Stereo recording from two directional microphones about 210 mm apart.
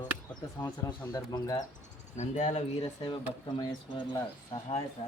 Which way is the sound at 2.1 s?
35° left (ahead or behind).